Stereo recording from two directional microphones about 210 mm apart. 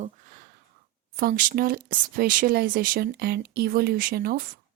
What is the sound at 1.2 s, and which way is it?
Speech, 45° right (ahead or behind).